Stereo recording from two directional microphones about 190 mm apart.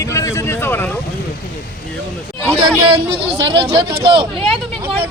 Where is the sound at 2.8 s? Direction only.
30° right (ahead or behind).